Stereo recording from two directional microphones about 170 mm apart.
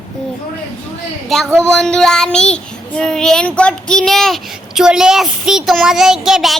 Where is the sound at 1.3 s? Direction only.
Centre (ahead or behind).